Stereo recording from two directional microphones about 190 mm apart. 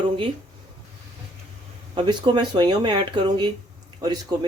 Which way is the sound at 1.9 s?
25° right (ahead or behind).